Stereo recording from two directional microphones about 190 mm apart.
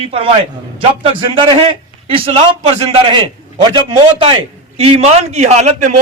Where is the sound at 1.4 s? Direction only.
25° right (ahead or behind).